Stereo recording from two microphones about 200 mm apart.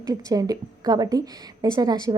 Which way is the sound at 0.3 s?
20° right (ahead or behind).